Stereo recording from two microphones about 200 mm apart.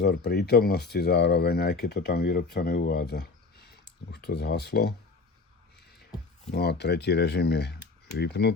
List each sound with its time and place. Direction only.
0.0 s speech: 55° left (ahead or behind)
6.5 s speech: 55° left (ahead or behind)